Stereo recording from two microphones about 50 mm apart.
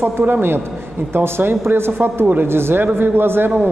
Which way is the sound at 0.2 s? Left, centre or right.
Right.